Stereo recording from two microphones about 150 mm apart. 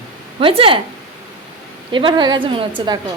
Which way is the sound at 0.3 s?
40° right (ahead or behind).